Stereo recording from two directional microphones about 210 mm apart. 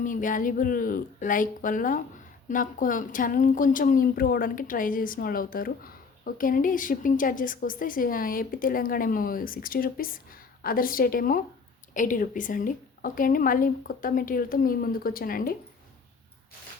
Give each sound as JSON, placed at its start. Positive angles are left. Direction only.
{"t": 0.0, "sound": "a woman's voice", "side_deg": 40}